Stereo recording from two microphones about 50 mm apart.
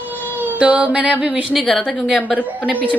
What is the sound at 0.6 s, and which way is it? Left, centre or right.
Music, right.